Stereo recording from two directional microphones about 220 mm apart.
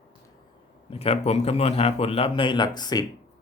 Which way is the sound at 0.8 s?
25° left (ahead or behind).